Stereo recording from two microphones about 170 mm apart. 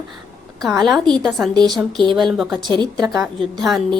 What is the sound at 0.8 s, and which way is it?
A woman's voice, centre (ahead or behind).